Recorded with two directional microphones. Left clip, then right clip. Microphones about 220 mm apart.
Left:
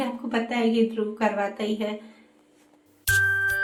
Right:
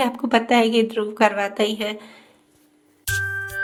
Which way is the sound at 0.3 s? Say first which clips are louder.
Right 8 dB; 55° right (ahead or behind).